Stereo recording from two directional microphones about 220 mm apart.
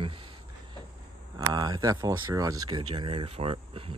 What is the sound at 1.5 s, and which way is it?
Speech, 20° right (ahead or behind).